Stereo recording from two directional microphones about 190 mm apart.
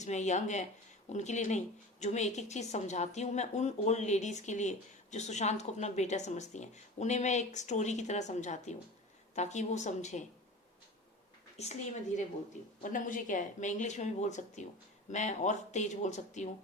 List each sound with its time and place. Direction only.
0.0 s speech: 35° left (ahead or behind)
11.5 s speech: 35° left (ahead or behind)